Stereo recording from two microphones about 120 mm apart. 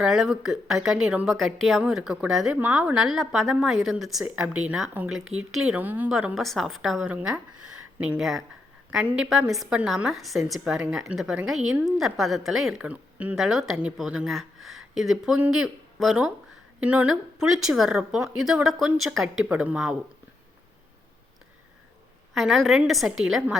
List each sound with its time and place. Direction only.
0.0 s a woman's voice: 5° right (ahead or behind)
1.3 s a woman's voice: centre (ahead or behind)
7.1 s speech: 10° right (ahead or behind)
8.2 s a woman's voice: centre (ahead or behind)
22.4 s a woman's voice: centre (ahead or behind)